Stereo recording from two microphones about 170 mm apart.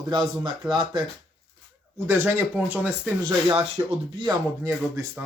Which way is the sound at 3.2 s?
25° right (ahead or behind).